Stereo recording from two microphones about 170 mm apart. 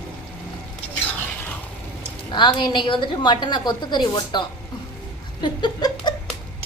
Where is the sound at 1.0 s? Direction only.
10° left (ahead or behind).